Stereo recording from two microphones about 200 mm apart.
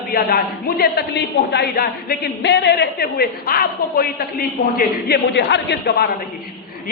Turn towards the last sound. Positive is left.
turn(degrees=55)  # may be behind; listen again after turning